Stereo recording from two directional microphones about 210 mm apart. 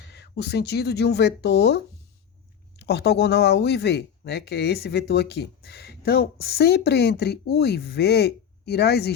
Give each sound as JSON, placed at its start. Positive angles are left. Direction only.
{"t": 0.1, "sound": "speech", "side_deg": 50}